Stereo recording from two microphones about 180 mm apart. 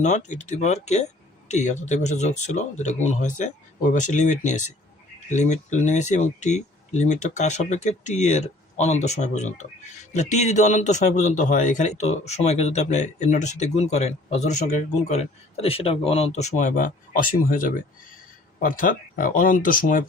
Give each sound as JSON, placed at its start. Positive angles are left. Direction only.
{"t": 0.0, "sound": "a man's voice", "side_deg": 40}